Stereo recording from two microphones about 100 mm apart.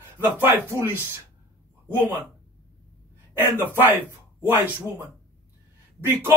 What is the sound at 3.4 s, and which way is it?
Speech, 20° right (ahead or behind).